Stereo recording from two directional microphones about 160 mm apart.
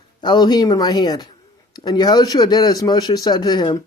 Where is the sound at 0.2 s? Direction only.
25° left (ahead or behind).